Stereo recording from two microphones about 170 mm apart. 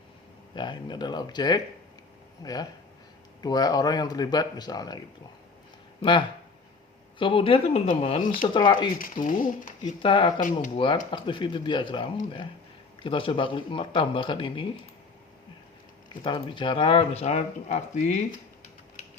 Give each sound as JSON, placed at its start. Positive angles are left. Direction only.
{"t": 0.5, "sound": "speech", "side_deg": 25}
{"t": 6.0, "sound": "speech", "side_deg": 30}
{"t": 9.2, "sound": "speech", "side_deg": 50}
{"t": 10.0, "sound": "speech", "side_deg": 30}
{"t": 16.2, "sound": "speech", "side_deg": 30}